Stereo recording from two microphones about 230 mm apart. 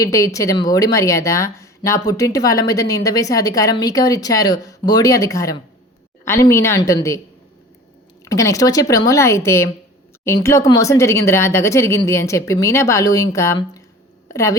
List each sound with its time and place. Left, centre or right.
0.0 s speech: centre
8.2 s speech: centre